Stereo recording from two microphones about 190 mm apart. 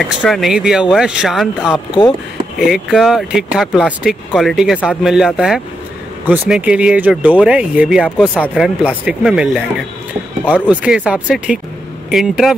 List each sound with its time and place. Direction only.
0.0 s speech: centre (ahead or behind)
1.9 s speech: 25° left (ahead or behind)
2.6 s speech: centre (ahead or behind)
10.4 s speech: 10° left (ahead or behind)
10.7 s speech: 5° right (ahead or behind)